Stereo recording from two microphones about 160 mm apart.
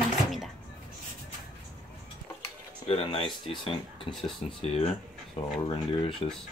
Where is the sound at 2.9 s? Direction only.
35° left (ahead or behind).